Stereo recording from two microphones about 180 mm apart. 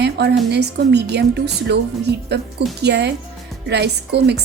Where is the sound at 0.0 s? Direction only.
65° right (ahead or behind).